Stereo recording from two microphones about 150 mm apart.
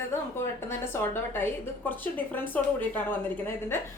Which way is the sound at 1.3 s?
15° left (ahead or behind).